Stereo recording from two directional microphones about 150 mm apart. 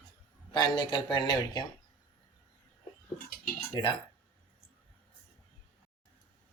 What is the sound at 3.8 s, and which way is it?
Speech, 25° left (ahead or behind).